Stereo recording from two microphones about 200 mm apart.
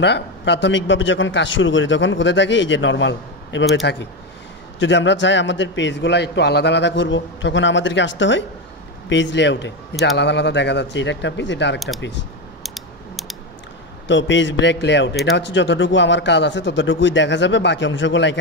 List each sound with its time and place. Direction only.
0.0 s a man's voice: 60° left (ahead or behind)
12.6 s typing: centre (ahead or behind)
14.0 s a man's voice: 65° left (ahead or behind)